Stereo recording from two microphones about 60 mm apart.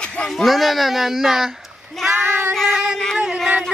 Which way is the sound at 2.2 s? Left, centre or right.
Right.